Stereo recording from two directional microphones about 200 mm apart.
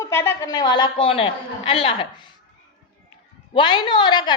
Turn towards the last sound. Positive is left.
turn(degrees=20)  # may be behind; listen again after turning